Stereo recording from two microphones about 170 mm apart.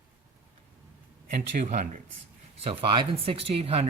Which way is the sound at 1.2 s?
50° right (ahead or behind).